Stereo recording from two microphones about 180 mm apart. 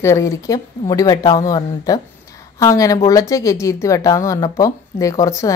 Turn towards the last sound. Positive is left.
turn(degrees=15)  # may be behind; listen again after turning